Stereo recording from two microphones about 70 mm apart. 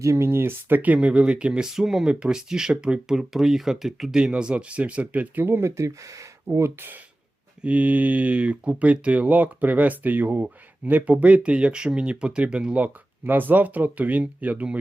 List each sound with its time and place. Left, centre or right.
0.0 s speech: right
7.6 s speech: right